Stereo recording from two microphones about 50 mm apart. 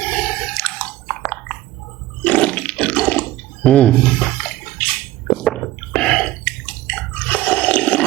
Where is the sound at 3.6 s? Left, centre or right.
Centre.